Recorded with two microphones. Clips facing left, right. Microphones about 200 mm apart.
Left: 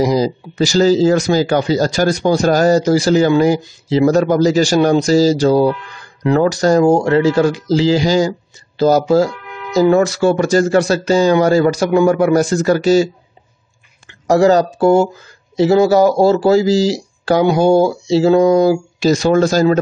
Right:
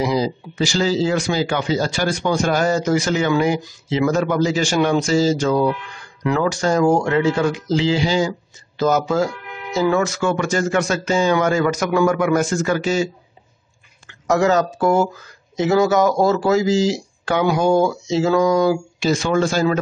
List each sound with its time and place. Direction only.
0.0 s speech: 40° left (ahead or behind)
14.2 s speech: 35° left (ahead or behind)